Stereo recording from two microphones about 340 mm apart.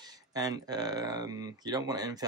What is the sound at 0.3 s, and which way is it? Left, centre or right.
Speech, centre.